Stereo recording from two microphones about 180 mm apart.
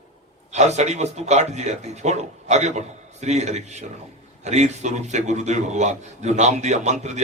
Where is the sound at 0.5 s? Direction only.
40° right (ahead or behind).